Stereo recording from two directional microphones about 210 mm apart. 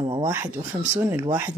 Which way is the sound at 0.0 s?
15° right (ahead or behind).